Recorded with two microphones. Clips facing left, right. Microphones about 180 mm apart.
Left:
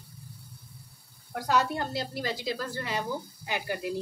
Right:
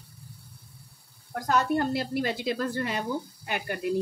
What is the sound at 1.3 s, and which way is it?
A woman's voice, 55° right (ahead or behind).